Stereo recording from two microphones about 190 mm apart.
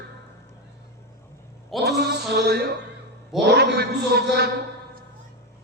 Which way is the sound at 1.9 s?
60° right (ahead or behind).